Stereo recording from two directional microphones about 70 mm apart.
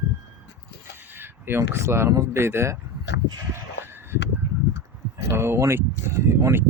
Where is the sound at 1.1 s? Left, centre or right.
Right.